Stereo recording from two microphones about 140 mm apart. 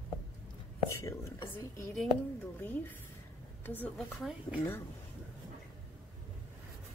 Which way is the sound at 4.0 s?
Centre (ahead or behind).